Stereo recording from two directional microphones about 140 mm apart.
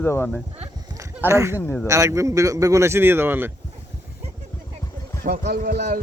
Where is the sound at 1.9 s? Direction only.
20° right (ahead or behind).